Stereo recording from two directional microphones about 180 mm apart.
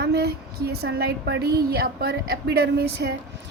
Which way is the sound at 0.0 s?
65° right (ahead or behind).